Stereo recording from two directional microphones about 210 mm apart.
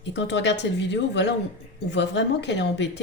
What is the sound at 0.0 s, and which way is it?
Speech, 55° left (ahead or behind).